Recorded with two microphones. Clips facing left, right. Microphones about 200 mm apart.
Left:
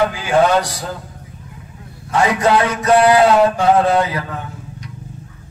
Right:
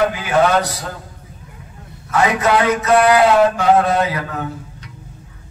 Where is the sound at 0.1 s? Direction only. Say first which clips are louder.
Left 2 dB; 30° left (ahead or behind).